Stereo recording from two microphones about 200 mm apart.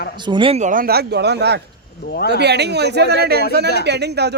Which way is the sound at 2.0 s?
50° left (ahead or behind).